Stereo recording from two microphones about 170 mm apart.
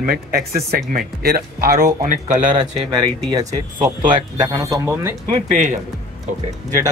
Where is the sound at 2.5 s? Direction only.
25° right (ahead or behind).